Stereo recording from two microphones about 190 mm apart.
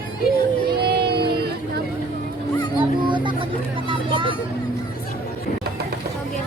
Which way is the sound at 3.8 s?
25° right (ahead or behind).